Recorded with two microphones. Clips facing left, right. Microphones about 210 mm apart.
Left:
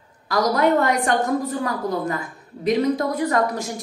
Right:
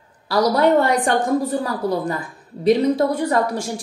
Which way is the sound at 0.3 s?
30° right (ahead or behind).